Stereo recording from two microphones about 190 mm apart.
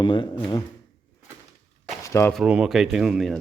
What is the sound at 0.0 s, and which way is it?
Speech, 25° left (ahead or behind).